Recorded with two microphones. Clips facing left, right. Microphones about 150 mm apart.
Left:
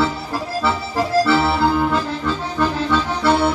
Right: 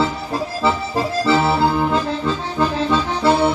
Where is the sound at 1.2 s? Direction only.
20° right (ahead or behind).